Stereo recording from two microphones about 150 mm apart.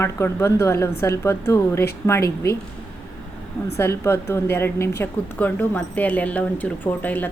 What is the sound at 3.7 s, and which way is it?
A woman's voice, 15° left (ahead or behind).